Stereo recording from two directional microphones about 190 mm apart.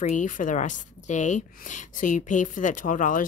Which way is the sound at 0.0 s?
40° left (ahead or behind).